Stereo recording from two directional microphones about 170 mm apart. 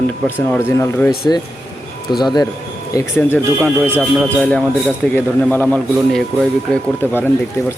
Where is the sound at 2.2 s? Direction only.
25° left (ahead or behind).